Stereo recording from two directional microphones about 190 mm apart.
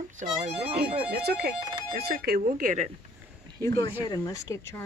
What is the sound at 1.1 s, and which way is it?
Speech, 55° right (ahead or behind).